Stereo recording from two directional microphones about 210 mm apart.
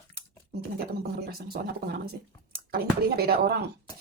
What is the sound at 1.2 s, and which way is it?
Speech, 50° right (ahead or behind).